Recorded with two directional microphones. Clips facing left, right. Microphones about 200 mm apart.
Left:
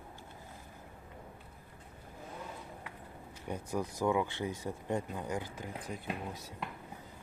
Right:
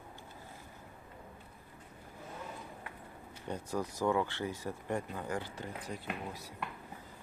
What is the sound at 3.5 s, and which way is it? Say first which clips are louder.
Speech: left 1 dB; 10° left (ahead or behind).